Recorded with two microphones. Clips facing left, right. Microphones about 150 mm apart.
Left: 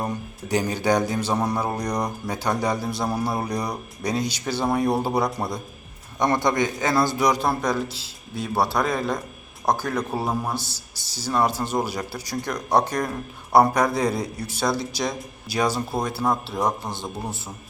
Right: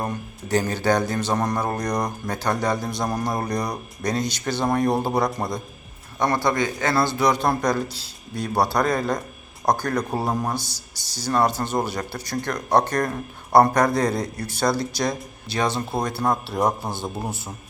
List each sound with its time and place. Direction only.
0.0 s a man's voice: 10° left (ahead or behind)
7.4 s a man's voice: 5° left (ahead or behind)